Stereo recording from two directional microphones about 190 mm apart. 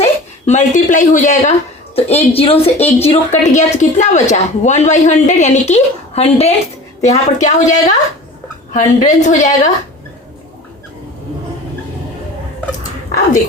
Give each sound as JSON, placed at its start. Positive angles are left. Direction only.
{"t": 0.0, "sound": "a woman's voice", "side_deg": 40}